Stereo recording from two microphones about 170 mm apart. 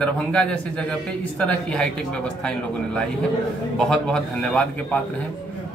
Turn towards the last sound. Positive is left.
turn(degrees=5)  # may be behind; listen again after turning